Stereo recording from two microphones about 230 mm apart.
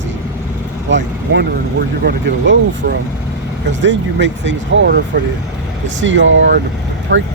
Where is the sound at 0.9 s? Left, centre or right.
Right.